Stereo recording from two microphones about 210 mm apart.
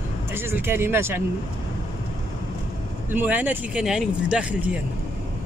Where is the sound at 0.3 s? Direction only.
10° right (ahead or behind).